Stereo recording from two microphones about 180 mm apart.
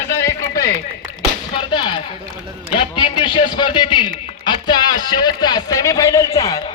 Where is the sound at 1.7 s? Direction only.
25° left (ahead or behind).